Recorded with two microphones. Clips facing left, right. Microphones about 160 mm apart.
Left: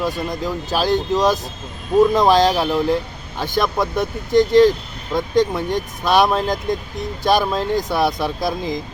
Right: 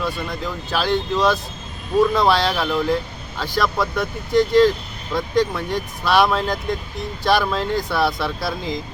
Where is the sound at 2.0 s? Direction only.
15° left (ahead or behind).